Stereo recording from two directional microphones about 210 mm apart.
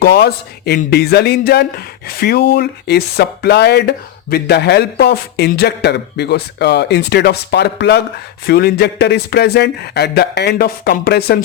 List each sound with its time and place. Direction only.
0.0 s speech: 50° left (ahead or behind)